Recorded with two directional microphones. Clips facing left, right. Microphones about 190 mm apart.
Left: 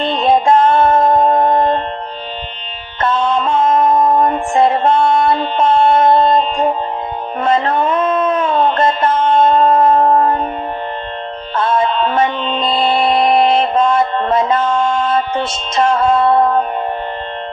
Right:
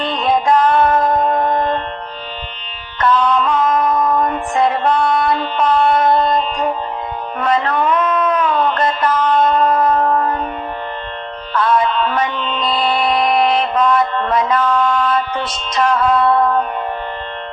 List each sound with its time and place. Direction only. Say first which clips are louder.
0.0 s music: left 3 dB; 25° left (ahead or behind)
3.0 s music: even; 25° left (ahead or behind)
7.4 s a sound: left 2 dB; 25° left (ahead or behind)
11.5 s music: even; 25° left (ahead or behind)